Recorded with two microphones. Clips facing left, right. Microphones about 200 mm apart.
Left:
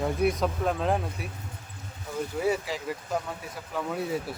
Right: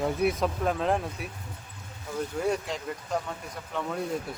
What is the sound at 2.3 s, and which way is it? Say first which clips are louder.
Speech: left 2 dB; 5° left (ahead or behind).